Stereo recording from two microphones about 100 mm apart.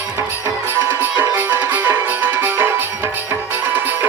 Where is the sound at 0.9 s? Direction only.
20° right (ahead or behind).